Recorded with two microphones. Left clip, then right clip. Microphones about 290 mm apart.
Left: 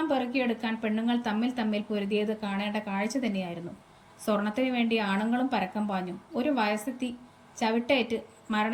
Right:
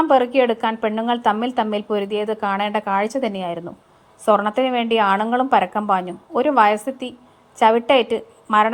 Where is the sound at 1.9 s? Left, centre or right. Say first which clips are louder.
Right 8 dB; right.